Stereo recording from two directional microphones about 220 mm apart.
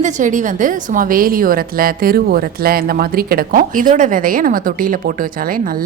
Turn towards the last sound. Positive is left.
turn(degrees=-40)  # may be behind; listen again after turning